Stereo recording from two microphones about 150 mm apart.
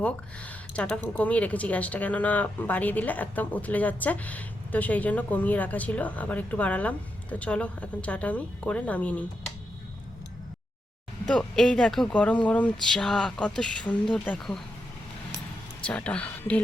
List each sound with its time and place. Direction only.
0.0 s speech: 10° left (ahead or behind)
11.3 s speech: 5° left (ahead or behind)
15.8 s a woman's voice: 10° left (ahead or behind)